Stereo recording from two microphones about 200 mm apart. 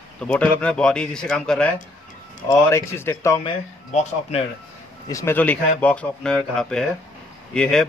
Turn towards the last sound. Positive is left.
turn(degrees=5)  # may be behind; listen again after turning